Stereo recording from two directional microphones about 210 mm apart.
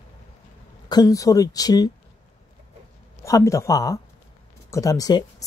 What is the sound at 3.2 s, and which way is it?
Speech, 15° left (ahead or behind).